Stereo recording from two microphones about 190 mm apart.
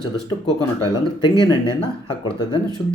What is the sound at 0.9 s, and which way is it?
Speech, 25° left (ahead or behind).